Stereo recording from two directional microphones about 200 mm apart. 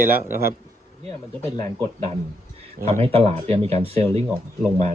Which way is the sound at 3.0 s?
30° right (ahead or behind).